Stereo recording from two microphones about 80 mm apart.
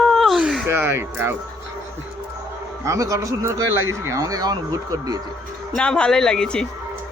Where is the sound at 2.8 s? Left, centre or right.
Right.